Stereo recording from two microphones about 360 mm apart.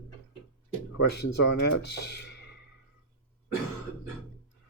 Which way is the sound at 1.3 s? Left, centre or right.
Left.